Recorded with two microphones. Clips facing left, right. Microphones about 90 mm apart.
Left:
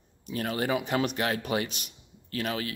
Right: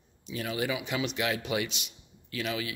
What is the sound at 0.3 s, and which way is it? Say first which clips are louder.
A man's voice: left 3 dB; 50° left (ahead or behind).